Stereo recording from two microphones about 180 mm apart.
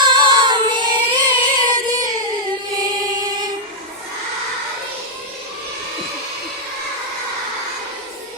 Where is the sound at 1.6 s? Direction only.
20° right (ahead or behind).